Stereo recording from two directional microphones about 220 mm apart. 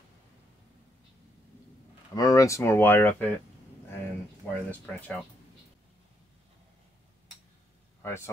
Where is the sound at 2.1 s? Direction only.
15° left (ahead or behind).